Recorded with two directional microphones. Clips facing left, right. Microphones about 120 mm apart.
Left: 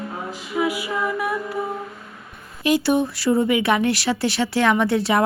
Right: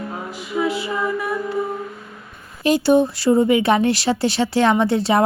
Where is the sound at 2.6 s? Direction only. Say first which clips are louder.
Right 4 dB; 30° right (ahead or behind).